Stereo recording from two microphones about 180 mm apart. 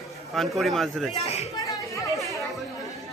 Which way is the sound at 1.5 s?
20° left (ahead or behind).